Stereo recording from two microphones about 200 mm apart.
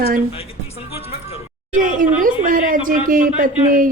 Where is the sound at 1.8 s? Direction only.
40° right (ahead or behind).